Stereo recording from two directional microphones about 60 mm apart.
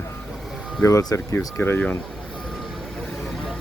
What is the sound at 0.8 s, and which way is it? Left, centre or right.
Speech, left.